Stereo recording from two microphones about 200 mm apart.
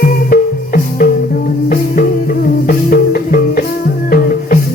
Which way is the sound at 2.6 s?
45° left (ahead or behind).